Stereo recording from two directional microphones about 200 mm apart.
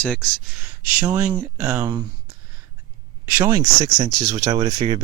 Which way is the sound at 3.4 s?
10° right (ahead or behind).